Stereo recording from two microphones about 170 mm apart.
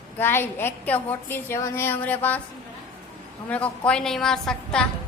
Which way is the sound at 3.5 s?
5° left (ahead or behind).